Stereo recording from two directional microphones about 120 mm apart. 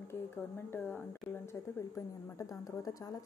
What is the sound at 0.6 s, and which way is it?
A woman's voice, 15° left (ahead or behind).